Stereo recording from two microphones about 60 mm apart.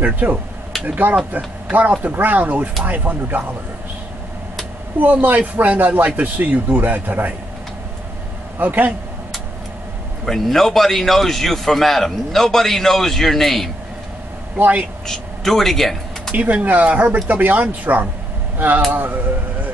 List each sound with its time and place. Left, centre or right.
0.0 s a man's voice: right
4.9 s a man's voice: right
8.5 s a man's voice: right
10.2 s a man's voice: centre
14.6 s a man's voice: right
15.0 s a sound: centre
16.3 s a man's voice: right